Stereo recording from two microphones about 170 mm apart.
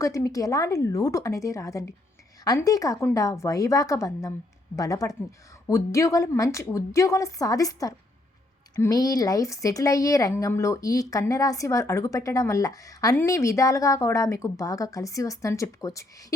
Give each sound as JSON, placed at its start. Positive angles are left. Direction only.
{"t": 0.0, "sound": "speech", "side_deg": 20}